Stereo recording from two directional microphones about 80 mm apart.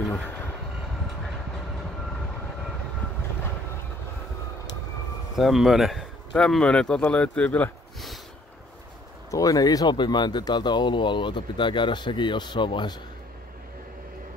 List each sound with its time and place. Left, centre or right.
5.4 s speech: centre
9.3 s speech: left